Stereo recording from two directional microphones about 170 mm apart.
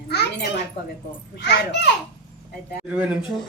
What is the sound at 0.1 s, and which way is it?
Speech, 75° left (ahead or behind).